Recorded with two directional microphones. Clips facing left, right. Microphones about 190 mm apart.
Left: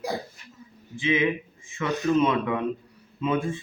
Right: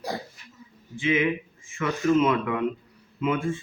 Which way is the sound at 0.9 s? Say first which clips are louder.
Even; 20° left (ahead or behind).